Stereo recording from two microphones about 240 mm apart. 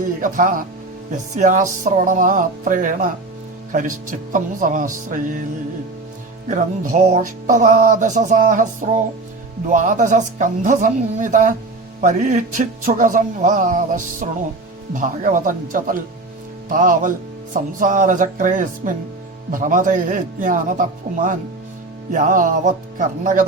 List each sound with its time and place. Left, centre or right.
0.2 s a man's voice: right
6.5 s a man's voice: right
22.1 s a man's voice: right